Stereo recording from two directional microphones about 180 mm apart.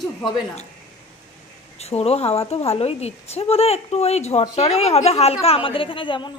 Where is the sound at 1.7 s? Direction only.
35° left (ahead or behind).